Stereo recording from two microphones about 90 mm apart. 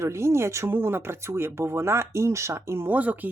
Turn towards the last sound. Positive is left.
turn(degrees=-15)  # may be behind; listen again after turning